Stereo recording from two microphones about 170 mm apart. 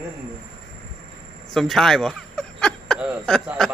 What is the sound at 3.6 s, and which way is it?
Speech, 5° left (ahead or behind).